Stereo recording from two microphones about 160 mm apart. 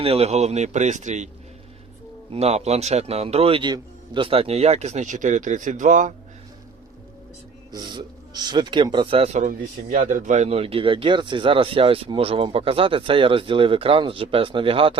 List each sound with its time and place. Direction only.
0.0 s a man's voice: 40° right (ahead or behind)
2.3 s speech: 40° right (ahead or behind)
7.7 s speech: 25° right (ahead or behind)
9.5 s speech: 60° right (ahead or behind); by 14.9 s 35° right (ahead or behind)